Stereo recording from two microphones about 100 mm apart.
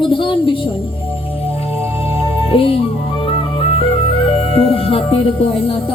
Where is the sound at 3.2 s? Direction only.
70° left (ahead or behind).